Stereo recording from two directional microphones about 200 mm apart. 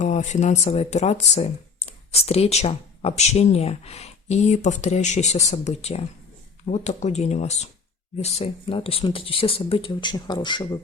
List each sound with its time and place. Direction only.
0.0 s speech: 35° left (ahead or behind)